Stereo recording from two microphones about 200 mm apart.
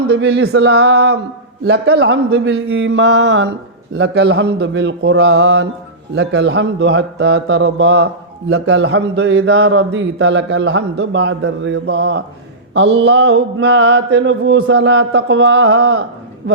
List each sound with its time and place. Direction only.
0.1 s speech: 60° right (ahead or behind)